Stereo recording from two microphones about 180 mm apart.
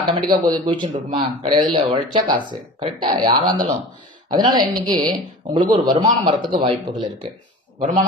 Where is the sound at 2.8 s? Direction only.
25° right (ahead or behind).